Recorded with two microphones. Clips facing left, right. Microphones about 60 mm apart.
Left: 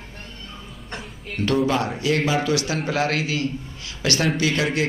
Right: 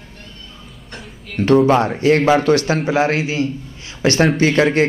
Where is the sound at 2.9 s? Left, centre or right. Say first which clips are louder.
Right 4 dB; right.